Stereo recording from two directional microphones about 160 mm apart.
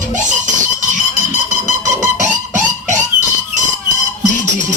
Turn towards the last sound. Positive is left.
turn(degrees=-50)  # may be behind; listen again after turning